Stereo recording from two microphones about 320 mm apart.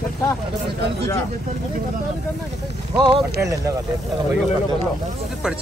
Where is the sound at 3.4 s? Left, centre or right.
Centre.